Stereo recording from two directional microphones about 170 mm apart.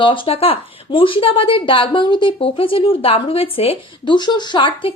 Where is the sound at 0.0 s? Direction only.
30° left (ahead or behind).